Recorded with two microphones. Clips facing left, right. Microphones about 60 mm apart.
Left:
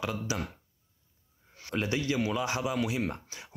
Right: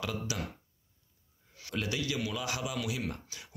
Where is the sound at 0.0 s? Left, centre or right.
Left.